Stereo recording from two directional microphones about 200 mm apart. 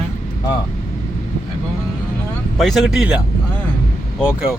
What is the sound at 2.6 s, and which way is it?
Speech, centre (ahead or behind).